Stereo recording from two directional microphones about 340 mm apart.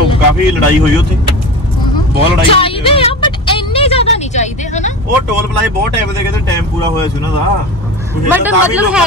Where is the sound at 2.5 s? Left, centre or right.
Centre.